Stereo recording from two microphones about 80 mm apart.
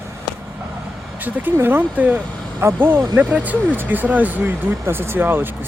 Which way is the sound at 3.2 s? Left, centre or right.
Centre.